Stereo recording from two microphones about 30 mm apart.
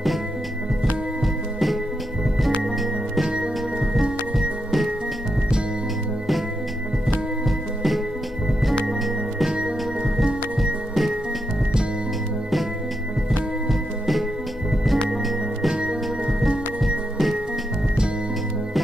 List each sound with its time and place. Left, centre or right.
1.2 s music: centre
3.9 s music: centre
7.4 s music: centre
10.1 s music: centre
13.7 s music: centre
15.8 s music: right
16.4 s music: centre